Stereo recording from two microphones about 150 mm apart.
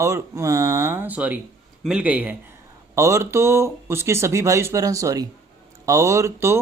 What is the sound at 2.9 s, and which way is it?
Speech, 20° right (ahead or behind).